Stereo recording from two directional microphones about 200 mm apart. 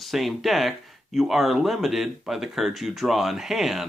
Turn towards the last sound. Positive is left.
turn(degrees=0)  # may be behind; listen again after turning